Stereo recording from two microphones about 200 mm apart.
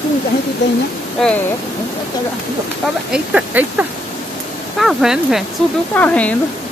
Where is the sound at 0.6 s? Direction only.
60° left (ahead or behind).